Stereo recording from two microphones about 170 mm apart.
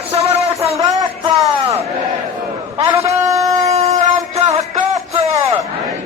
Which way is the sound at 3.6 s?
40° right (ahead or behind).